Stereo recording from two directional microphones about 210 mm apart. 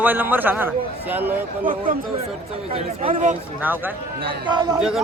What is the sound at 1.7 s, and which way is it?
Speech, 40° right (ahead or behind).